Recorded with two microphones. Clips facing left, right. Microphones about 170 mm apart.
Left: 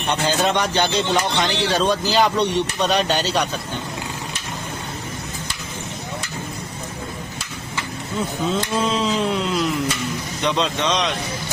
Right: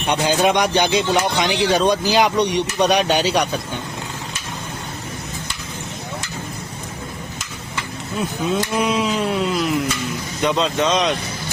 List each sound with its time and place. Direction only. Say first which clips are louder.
0.1 s speech: right 3 dB; 15° right (ahead or behind)
8.5 s a man's voice: right 3 dB; 15° right (ahead or behind)